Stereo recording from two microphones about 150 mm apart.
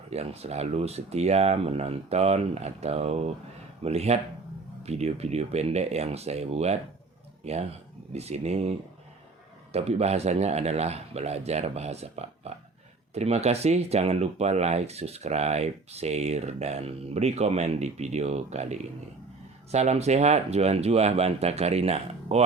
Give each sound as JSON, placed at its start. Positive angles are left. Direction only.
{"t": 0.1, "sound": "speech", "side_deg": -45}
{"t": 9.7, "sound": "speech", "side_deg": -45}